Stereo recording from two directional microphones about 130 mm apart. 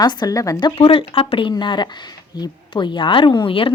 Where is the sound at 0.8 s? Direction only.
45° left (ahead or behind).